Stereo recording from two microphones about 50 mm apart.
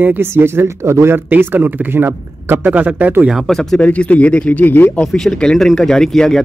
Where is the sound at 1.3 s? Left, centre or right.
Right.